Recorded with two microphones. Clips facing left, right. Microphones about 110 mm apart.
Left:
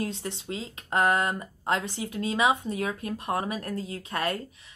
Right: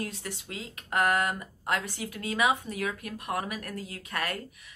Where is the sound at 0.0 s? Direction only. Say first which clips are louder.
Left 4 dB; 25° left (ahead or behind).